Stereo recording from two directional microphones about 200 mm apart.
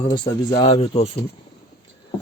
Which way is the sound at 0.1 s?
20° left (ahead or behind).